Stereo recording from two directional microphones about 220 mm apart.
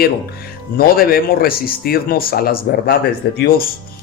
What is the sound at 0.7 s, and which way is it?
Speech, 40° left (ahead or behind).